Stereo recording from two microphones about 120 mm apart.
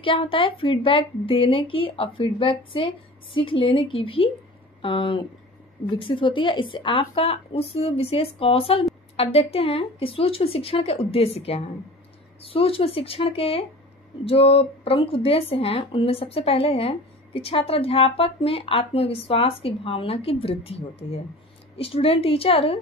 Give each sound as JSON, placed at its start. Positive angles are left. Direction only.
{"t": 0.0, "sound": "speech", "side_deg": 45}